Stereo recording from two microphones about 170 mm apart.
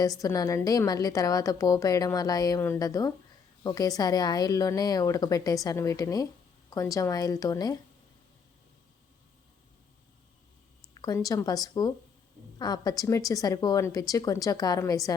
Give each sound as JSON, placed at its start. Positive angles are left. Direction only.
{"t": 0.0, "sound": "a woman's voice", "side_deg": 20}
{"t": 11.0, "sound": "a woman's voice", "side_deg": 20}